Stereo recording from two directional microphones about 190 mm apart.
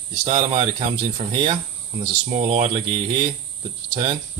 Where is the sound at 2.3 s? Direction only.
35° right (ahead or behind).